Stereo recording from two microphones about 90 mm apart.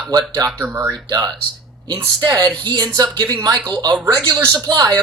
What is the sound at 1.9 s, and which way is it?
Speech, 55° right (ahead or behind).